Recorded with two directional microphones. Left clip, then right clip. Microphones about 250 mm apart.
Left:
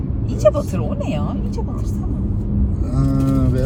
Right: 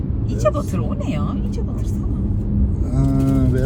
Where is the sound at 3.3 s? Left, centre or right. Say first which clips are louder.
Even; centre.